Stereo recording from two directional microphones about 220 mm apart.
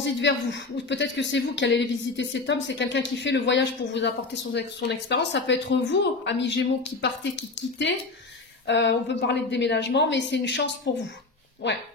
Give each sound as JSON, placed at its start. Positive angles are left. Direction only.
{"t": 0.0, "sound": "speech", "side_deg": 55}
{"t": 8.6, "sound": "speech", "side_deg": 55}